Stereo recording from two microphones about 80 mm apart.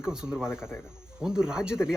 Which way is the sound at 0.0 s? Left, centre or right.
Centre.